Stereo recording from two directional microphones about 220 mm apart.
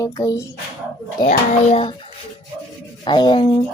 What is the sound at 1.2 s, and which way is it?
Speech, 35° left (ahead or behind).